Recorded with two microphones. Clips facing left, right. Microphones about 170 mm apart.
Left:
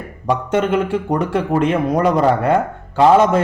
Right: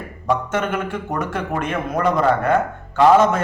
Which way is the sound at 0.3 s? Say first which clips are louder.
Left 4 dB; 30° left (ahead or behind).